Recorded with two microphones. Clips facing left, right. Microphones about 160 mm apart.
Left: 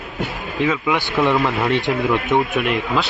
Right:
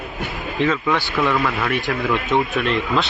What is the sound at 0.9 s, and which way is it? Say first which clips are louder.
Speech: left 2 dB; 20° left (ahead or behind).